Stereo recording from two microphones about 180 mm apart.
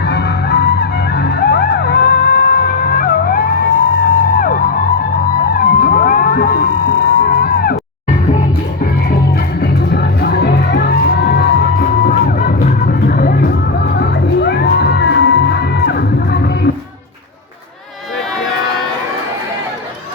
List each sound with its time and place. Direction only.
0.0 s music: 65° left (ahead or behind)
8.8 s music: 55° left (ahead or behind)
13.9 s music: 65° left (ahead or behind)